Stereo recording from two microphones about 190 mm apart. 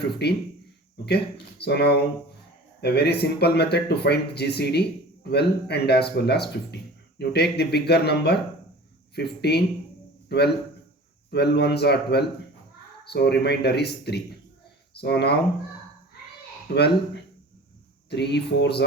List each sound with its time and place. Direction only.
0.0 s a man's voice: 60° left (ahead or behind)
16.7 s speech: 50° left (ahead or behind)
18.1 s speech: 60° left (ahead or behind)